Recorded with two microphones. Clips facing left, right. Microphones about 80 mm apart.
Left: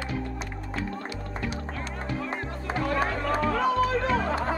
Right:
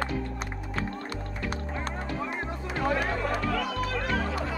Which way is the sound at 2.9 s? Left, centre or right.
Left.